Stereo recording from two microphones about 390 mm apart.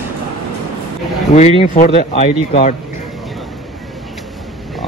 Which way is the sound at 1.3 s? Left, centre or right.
Centre.